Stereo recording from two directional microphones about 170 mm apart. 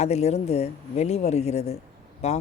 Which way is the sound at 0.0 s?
40° left (ahead or behind).